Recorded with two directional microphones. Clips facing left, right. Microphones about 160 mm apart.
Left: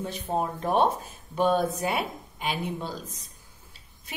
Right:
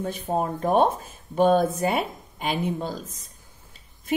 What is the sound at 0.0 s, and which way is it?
A woman's voice, 45° right (ahead or behind).